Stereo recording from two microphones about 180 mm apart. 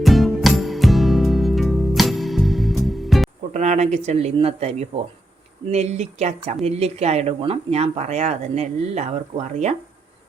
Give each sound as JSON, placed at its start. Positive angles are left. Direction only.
{"t": 0.0, "sound": "music", "side_deg": 0}
{"t": 3.5, "sound": "speech", "side_deg": -40}